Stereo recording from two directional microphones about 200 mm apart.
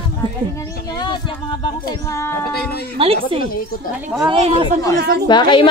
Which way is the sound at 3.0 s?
25° right (ahead or behind).